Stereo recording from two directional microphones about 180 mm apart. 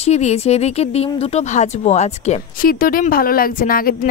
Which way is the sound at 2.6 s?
55° left (ahead or behind).